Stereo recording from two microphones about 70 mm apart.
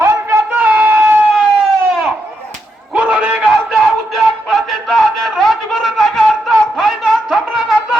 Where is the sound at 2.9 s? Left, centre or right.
Centre.